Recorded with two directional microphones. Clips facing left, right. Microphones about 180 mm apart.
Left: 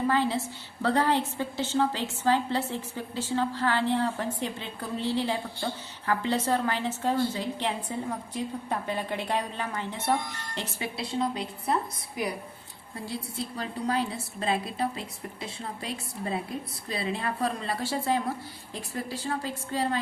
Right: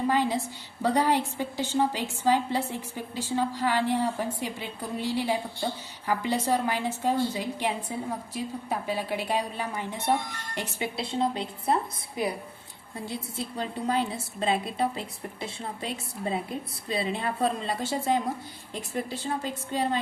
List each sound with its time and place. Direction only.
0.1 s a woman's voice: 15° right (ahead or behind)
10.9 s a woman's voice: 25° right (ahead or behind)
16.9 s a woman's voice: 25° right (ahead or behind)
19.2 s a woman's voice: 20° right (ahead or behind)